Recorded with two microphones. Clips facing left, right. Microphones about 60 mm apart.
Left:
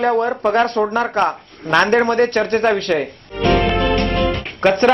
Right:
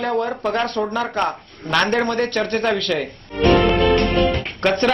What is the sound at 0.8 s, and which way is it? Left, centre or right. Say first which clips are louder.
Speech: left 4 dB; centre.